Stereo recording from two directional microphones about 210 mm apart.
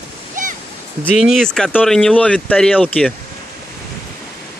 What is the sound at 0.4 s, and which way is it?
Stream, 35° right (ahead or behind).